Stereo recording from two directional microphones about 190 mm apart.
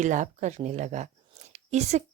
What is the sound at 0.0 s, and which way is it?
A woman's voice, 40° right (ahead or behind).